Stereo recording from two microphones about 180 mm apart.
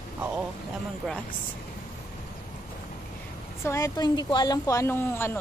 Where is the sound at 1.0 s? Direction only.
Centre (ahead or behind).